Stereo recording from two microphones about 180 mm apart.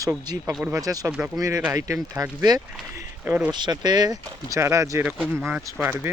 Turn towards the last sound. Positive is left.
turn(degrees=-10)  # may be behind; listen again after turning